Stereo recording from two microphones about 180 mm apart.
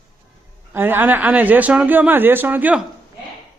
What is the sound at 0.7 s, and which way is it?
Speech, 10° right (ahead or behind).